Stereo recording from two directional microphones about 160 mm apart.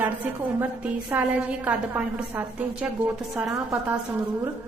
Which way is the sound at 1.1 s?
10° right (ahead or behind).